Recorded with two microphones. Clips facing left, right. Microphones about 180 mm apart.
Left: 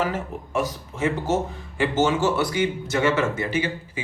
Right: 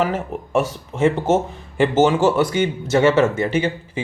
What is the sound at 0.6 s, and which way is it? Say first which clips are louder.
Speech: right 6 dB; 25° right (ahead or behind).